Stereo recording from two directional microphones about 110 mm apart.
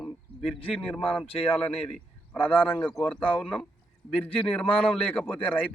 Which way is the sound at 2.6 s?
10° left (ahead or behind).